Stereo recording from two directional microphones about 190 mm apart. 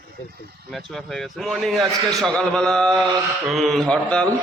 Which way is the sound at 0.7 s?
Centre (ahead or behind).